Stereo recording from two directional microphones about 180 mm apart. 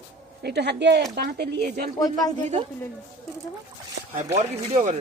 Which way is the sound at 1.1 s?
60° right (ahead or behind).